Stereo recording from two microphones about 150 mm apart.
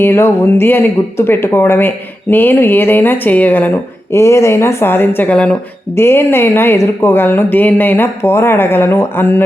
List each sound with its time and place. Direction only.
0.0 s a woman's voice: 15° left (ahead or behind)